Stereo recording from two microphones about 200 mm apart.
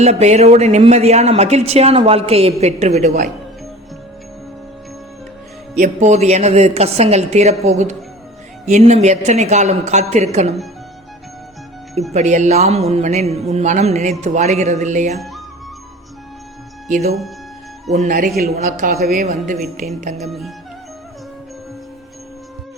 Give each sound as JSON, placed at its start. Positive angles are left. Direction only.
{"t": 0.0, "sound": "speech", "side_deg": -35}
{"t": 5.8, "sound": "speech", "side_deg": -35}
{"t": 12.1, "sound": "speech", "side_deg": -35}
{"t": 16.9, "sound": "a man's voice", "side_deg": -30}